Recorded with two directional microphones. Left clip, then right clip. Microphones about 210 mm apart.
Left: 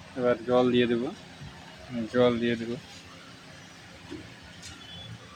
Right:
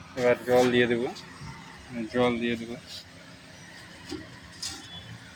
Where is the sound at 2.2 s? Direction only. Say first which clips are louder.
Left 2 dB; 20° left (ahead or behind).